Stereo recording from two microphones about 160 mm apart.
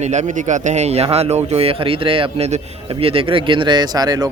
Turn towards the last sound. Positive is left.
turn(degrees=-25)  # may be behind; listen again after turning